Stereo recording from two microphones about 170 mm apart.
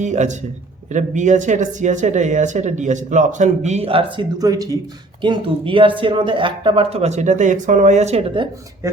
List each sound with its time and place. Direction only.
0.0 s speech: 45° right (ahead or behind)
8.8 s speech: 15° right (ahead or behind)